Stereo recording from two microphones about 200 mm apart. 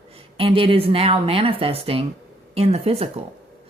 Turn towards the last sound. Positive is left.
turn(degrees=-30)  # may be behind; listen again after turning